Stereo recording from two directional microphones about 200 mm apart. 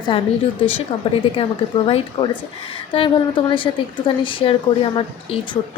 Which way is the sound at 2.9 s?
25° left (ahead or behind).